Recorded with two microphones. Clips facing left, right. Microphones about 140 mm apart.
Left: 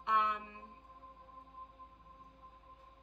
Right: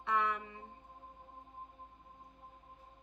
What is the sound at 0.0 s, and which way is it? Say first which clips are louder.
Music: even; 20° left (ahead or behind).